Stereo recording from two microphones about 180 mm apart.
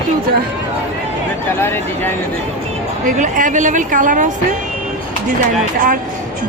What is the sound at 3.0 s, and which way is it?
Speech, 45° right (ahead or behind).